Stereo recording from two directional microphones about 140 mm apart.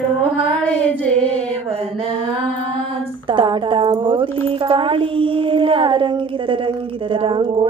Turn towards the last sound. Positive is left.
turn(degrees=-35)  # may be behind; listen again after turning